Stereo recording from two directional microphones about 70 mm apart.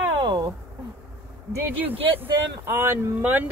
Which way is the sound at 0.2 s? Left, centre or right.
Right.